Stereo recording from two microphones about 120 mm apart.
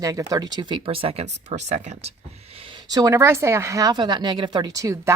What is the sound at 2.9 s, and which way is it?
A woman's voice, 30° right (ahead or behind).